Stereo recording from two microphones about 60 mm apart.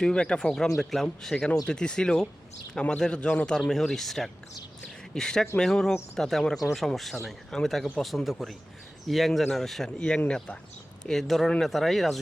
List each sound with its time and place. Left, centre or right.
0.0 s a man's voice: centre
10.2 s a man's voice: centre
11.1 s speech: centre